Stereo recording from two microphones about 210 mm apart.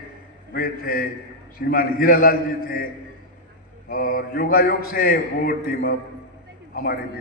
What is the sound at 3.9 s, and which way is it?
A man's voice, 45° left (ahead or behind).